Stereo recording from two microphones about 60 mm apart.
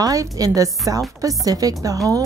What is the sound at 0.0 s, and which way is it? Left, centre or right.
A woman's voice, right.